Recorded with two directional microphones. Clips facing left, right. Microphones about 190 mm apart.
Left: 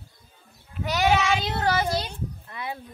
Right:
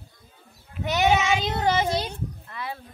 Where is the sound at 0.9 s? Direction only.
20° right (ahead or behind).